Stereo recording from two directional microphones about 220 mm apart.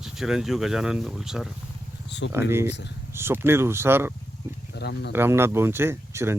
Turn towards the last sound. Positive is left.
turn(degrees=-10)  # may be behind; listen again after turning